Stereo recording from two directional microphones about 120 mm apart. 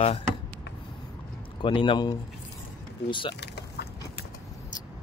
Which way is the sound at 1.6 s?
45° left (ahead or behind).